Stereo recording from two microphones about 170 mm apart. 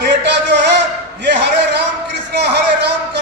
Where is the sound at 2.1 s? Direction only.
75° right (ahead or behind).